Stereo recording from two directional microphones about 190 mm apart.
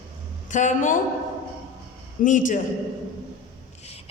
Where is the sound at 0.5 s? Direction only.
40° left (ahead or behind).